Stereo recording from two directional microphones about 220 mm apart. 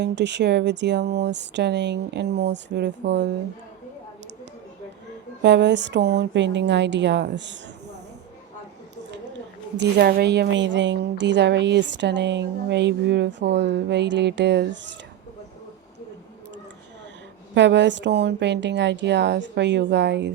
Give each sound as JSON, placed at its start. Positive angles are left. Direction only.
{"t": 0.0, "sound": "a woman's voice", "side_deg": -50}
{"t": 5.4, "sound": "a woman's voice", "side_deg": -50}
{"t": 9.7, "sound": "a woman's voice", "side_deg": -45}
{"t": 17.5, "sound": "a woman's voice", "side_deg": -55}